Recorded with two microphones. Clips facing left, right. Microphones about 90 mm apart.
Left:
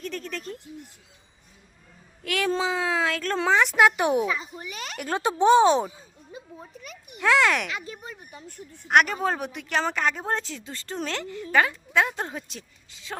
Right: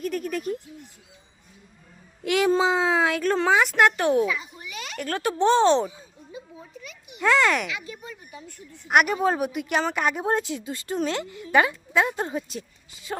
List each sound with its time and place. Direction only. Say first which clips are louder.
0.0 s a woman's voice: right 6 dB; 10° right (ahead or behind)
2.2 s speech: right 5 dB; 20° right (ahead or behind)
3.3 s speech: left 1 dB; centre (ahead or behind)
3.9 s speech: right 2 dB; 15° left (ahead or behind)
4.3 s speech: even; 35° left (ahead or behind)
4.9 s speech: even; 20° left (ahead or behind)
6.8 s a child's voice: even; 45° left (ahead or behind)
7.2 s speech: even; centre (ahead or behind)
7.7 s speech: even; 35° left (ahead or behind)
8.9 s a woman's voice: right 1 dB; 5° right (ahead or behind)